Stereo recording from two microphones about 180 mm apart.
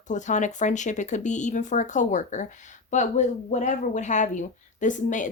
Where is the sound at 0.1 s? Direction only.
45° left (ahead or behind).